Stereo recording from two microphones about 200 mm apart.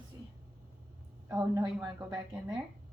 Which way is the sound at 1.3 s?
15° right (ahead or behind).